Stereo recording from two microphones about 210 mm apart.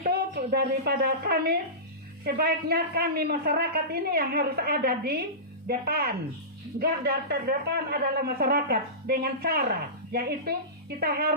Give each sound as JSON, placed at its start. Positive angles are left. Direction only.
{"t": 0.0, "sound": "a woman's voice", "side_deg": -45}